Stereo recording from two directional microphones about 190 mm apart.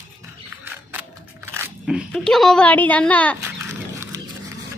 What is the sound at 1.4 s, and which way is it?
Biting, 10° right (ahead or behind).